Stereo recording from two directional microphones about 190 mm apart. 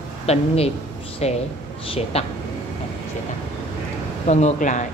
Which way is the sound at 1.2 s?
35° left (ahead or behind).